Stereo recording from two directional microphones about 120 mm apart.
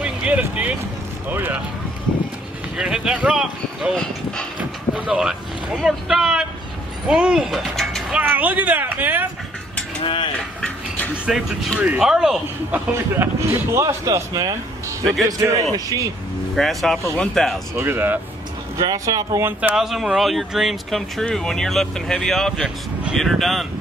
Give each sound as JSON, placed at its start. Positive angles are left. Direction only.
{"t": 0.0, "sound": "vehicle", "side_deg": -10}
{"t": 1.3, "sound": "speech", "side_deg": -15}
{"t": 2.8, "sound": "speech", "side_deg": -5}
{"t": 4.6, "sound": "vehicle", "side_deg": -10}
{"t": 7.1, "sound": "speech", "side_deg": -5}
{"t": 8.2, "sound": "speech", "side_deg": -15}
{"t": 10.0, "sound": "mechanisms", "side_deg": 45}
{"t": 11.2, "sound": "speech", "side_deg": -5}
{"t": 12.7, "sound": "speech", "side_deg": -20}
{"t": 16.5, "sound": "speech", "side_deg": 5}
{"t": 17.7, "sound": "speech", "side_deg": -20}
{"t": 18.8, "sound": "speech", "side_deg": -30}
{"t": 19.7, "sound": "speech", "side_deg": -5}